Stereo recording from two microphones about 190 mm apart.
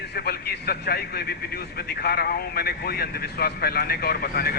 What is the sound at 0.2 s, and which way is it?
A man's voice, 55° left (ahead or behind).